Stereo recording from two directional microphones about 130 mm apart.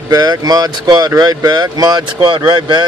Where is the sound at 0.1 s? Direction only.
30° right (ahead or behind).